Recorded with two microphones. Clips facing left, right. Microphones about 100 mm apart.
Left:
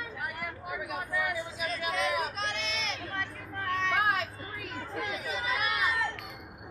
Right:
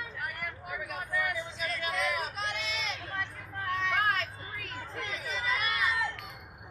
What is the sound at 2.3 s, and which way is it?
Vehicle, 5° right (ahead or behind).